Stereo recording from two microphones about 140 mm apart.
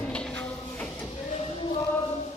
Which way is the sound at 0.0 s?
5° left (ahead or behind).